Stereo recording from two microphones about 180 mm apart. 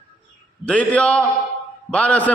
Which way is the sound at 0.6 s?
5° left (ahead or behind).